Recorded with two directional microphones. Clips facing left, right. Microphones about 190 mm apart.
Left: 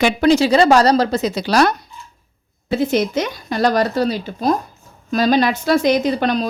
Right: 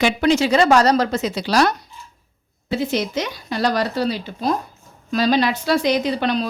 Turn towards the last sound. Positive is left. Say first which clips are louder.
# left 3 dB
turn(degrees=45)  # may be behind; listen again after turning